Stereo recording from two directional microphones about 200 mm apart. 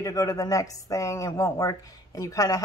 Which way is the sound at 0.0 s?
15° left (ahead or behind).